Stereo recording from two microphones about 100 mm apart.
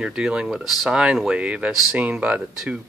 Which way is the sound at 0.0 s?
10° right (ahead or behind).